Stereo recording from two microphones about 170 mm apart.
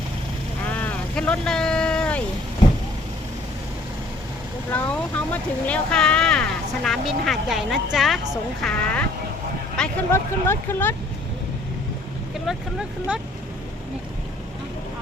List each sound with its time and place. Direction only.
0.7 s vehicle: 10° left (ahead or behind)
4.7 s speech: 10° left (ahead or behind)
10.1 s speech: 15° left (ahead or behind)
12.5 s speech: 5° right (ahead or behind)